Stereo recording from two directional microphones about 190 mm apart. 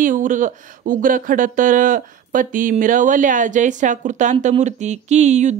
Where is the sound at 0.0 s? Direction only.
45° right (ahead or behind).